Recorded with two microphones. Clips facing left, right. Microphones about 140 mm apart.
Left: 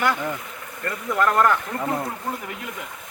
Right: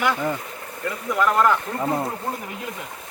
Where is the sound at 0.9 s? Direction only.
5° right (ahead or behind).